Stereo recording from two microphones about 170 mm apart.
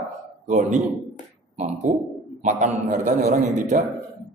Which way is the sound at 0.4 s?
45° right (ahead or behind).